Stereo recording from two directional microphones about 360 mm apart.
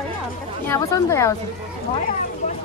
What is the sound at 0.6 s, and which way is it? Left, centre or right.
Speech, centre.